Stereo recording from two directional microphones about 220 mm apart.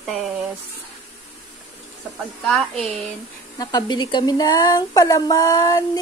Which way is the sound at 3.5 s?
20° left (ahead or behind).